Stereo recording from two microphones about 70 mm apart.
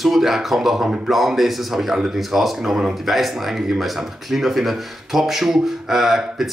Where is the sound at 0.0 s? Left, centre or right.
Centre.